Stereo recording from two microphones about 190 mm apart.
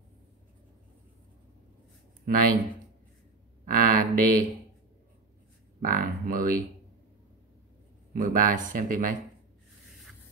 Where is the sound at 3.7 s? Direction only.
50° right (ahead or behind).